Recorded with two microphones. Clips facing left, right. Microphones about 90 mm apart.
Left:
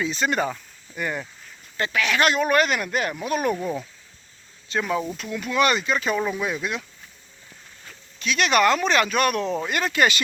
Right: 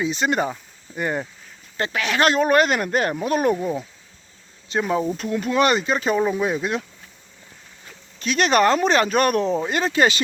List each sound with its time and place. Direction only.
0.0 s speech: 20° right (ahead or behind)
3.5 s speech: 20° right (ahead or behind)
8.2 s speech: 35° right (ahead or behind)